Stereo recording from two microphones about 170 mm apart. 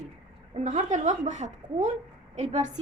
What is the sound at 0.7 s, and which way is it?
A woman's voice, 45° right (ahead or behind).